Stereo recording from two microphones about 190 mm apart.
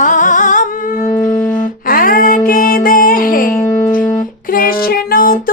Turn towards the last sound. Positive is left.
turn(degrees=50)  # may be behind; listen again after turning